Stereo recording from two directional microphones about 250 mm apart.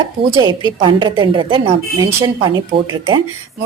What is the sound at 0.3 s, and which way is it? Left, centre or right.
A woman's voice, centre.